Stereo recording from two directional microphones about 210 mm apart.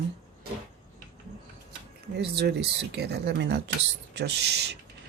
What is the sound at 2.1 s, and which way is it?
Speech, 50° right (ahead or behind).